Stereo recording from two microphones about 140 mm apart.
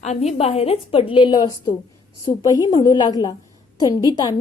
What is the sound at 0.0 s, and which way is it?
A woman's voice, 55° left (ahead or behind).